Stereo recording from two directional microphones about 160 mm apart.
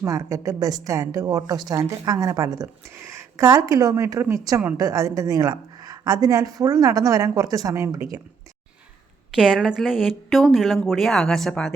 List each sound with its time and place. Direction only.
0.0 s a woman's voice: 20° right (ahead or behind)
9.3 s speech: 5° right (ahead or behind)